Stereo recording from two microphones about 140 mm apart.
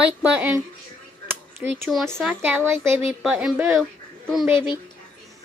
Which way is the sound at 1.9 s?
5° left (ahead or behind).